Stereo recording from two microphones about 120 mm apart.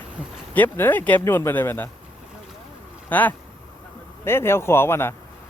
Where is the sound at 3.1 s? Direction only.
15° left (ahead or behind).